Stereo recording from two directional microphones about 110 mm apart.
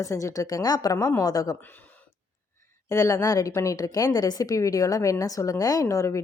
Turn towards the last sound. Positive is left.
turn(degrees=30)  # may be behind; listen again after turning